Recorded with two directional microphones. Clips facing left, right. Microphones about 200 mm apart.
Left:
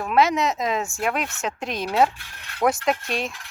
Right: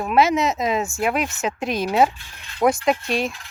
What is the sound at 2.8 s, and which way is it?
Speech, centre (ahead or behind).